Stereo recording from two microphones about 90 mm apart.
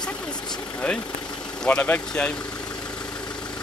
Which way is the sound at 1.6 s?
15° left (ahead or behind).